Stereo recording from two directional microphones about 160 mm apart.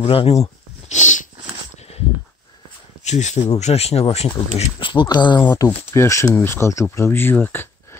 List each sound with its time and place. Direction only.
0.0 s speech: 35° left (ahead or behind)
3.0 s speech: 45° left (ahead or behind); by 5.5 s 30° left (ahead or behind)
5.8 s speech: 15° left (ahead or behind)